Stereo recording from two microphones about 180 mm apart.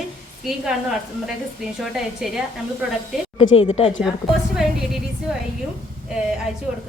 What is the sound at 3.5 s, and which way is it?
Speech, 30° left (ahead or behind).